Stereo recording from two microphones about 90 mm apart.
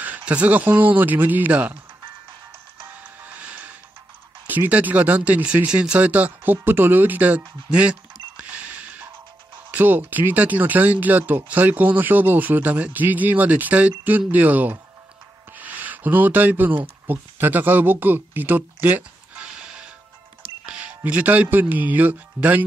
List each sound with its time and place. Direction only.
0.0 s speech: 20° right (ahead or behind)
3.2 s music: 15° right (ahead or behind)
4.5 s speech: 20° right (ahead or behind)